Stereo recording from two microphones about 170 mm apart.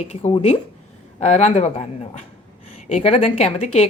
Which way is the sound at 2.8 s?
35° left (ahead or behind).